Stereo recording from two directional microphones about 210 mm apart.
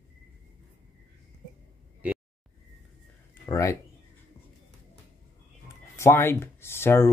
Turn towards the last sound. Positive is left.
turn(degrees=10)  # may be behind; listen again after turning